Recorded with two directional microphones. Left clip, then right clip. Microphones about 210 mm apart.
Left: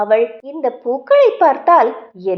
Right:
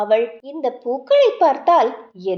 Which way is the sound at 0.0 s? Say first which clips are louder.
Left 3 dB; 15° left (ahead or behind).